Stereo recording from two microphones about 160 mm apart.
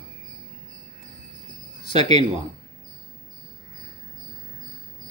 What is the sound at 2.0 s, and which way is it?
Speech, 30° left (ahead or behind).